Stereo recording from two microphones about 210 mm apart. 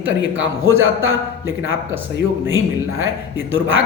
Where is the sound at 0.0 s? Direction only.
70° right (ahead or behind).